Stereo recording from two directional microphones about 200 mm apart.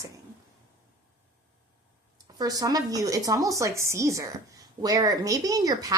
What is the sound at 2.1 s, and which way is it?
Speech, 20° right (ahead or behind).